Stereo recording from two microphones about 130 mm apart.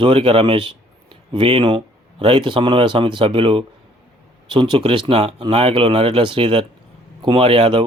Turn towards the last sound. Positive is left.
turn(degrees=-50)  # may be behind; listen again after turning